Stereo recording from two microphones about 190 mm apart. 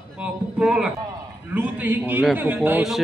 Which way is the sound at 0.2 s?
5° right (ahead or behind).